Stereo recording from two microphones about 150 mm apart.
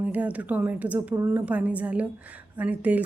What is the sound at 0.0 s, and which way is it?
A woman's voice, 10° right (ahead or behind).